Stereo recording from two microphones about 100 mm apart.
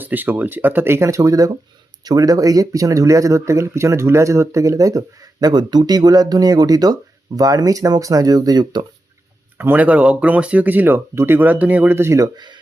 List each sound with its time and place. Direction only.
0.0 s speech: 20° right (ahead or behind); by 8.8 s 40° right (ahead or behind)
9.6 s speech: 15° right (ahead or behind)